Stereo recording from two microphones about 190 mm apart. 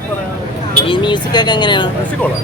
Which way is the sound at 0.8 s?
25° left (ahead or behind).